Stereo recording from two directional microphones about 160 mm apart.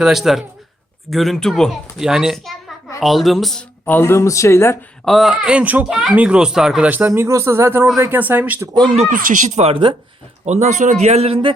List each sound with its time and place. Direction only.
0.0 s a child's voice: centre (ahead or behind); by 4.8 s 15° left (ahead or behind)
5.0 s speech: centre (ahead or behind)
9.0 s speech: 60° right (ahead or behind); by 11.5 s 35° right (ahead or behind)